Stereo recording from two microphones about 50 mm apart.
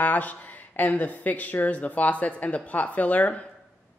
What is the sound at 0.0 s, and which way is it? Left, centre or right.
A man's voice, left.